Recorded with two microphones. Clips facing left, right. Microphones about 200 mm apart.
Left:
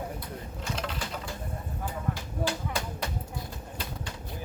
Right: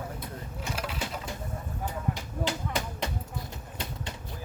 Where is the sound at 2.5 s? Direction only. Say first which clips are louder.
Right 1 dB; 20° right (ahead or behind).